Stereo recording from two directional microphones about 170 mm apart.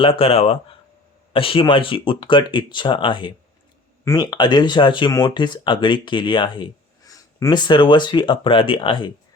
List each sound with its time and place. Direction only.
0.0 s speech: 35° left (ahead or behind)